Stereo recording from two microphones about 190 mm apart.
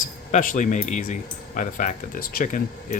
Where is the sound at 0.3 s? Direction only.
40° left (ahead or behind).